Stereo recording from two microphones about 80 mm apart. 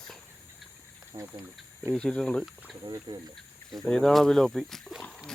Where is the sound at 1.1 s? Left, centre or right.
Right.